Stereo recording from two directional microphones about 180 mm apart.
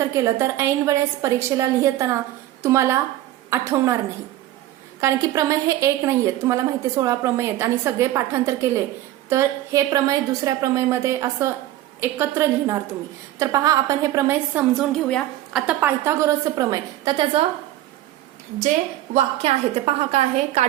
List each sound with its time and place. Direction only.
0.3 s a woman's voice: 15° right (ahead or behind)
4.9 s a woman's voice: 15° right (ahead or behind)
14.8 s a woman's voice: centre (ahead or behind)
15.8 s a woman's voice: 15° right (ahead or behind)
19.1 s a woman's voice: 35° right (ahead or behind)